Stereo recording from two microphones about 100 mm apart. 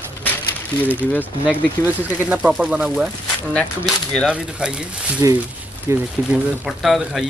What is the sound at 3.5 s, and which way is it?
Speech, 10° left (ahead or behind).